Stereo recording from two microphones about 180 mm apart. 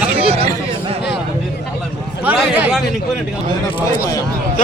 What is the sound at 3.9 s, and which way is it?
Speech, 20° left (ahead or behind).